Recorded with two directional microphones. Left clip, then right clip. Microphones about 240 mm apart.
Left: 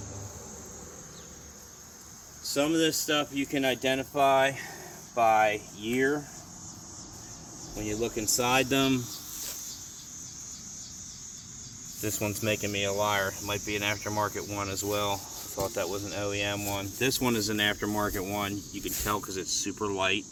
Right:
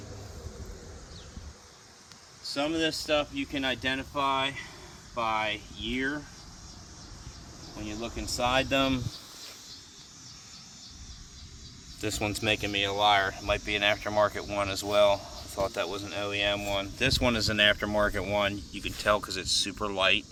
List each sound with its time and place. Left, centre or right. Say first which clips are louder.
2.4 s speech: left 3 dB; centre
7.8 s speech: left 6 dB; right
12.0 s speech: right 2 dB; right